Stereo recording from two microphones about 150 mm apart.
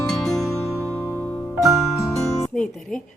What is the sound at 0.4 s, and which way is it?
Music, 20° left (ahead or behind).